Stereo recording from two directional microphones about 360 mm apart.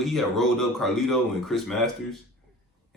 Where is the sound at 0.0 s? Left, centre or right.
Centre.